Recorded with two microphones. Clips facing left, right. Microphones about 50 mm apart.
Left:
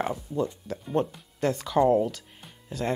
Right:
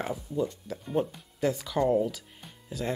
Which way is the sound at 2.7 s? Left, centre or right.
Centre.